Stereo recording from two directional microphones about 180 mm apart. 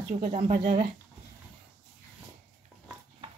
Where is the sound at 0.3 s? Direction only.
35° right (ahead or behind).